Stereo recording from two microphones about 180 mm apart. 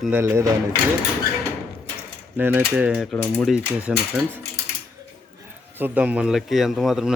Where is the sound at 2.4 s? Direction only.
10° right (ahead or behind).